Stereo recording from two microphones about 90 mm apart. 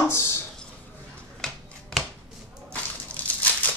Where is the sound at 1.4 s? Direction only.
5° left (ahead or behind).